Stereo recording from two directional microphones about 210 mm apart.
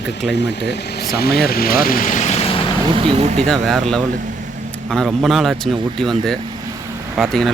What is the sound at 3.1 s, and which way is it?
Speech, 30° right (ahead or behind).